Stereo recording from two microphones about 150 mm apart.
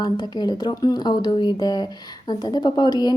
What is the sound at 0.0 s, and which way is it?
A woman's voice, 30° left (ahead or behind).